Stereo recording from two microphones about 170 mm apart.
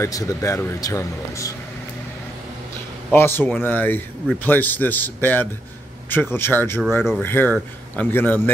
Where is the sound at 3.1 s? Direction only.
15° left (ahead or behind).